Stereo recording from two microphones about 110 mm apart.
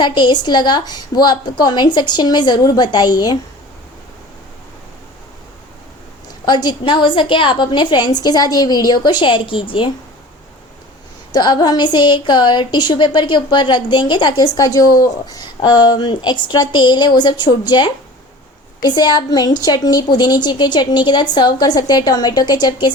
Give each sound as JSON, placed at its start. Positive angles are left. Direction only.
{"t": 0.0, "sound": "a woman's voice", "side_deg": 45}
{"t": 6.4, "sound": "a woman's voice", "side_deg": 40}
{"t": 11.3, "sound": "a woman's voice", "side_deg": 40}